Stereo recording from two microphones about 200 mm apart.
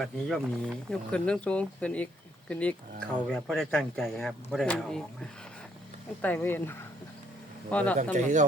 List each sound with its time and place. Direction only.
0.0 s speech: centre (ahead or behind)
6.2 s speech: 10° left (ahead or behind)
8.1 s speech: 40° right (ahead or behind)